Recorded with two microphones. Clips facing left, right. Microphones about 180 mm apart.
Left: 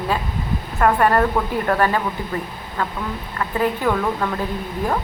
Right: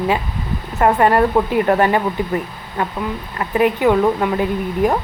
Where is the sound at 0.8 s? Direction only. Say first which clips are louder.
Right 3 dB; 20° right (ahead or behind).